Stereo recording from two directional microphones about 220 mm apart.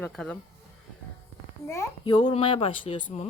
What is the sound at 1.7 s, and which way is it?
A child's voice, 15° left (ahead or behind).